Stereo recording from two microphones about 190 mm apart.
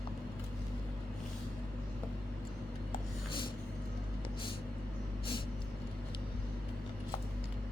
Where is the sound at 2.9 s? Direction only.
25° left (ahead or behind).